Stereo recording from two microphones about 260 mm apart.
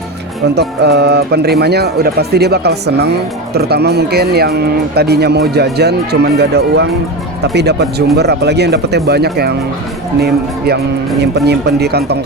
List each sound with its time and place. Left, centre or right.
0.5 s speech: right